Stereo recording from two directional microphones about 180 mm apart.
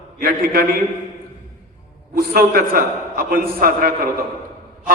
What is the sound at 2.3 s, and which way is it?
A man's voice, 55° right (ahead or behind).